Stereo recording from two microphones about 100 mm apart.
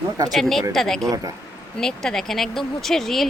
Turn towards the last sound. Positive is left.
turn(degrees=5)  # may be behind; listen again after turning